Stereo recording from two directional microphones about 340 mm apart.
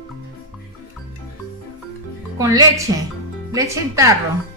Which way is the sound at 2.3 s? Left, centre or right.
Centre.